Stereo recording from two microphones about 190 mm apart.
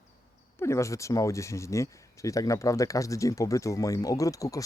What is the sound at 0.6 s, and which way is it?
Speech, 15° left (ahead or behind).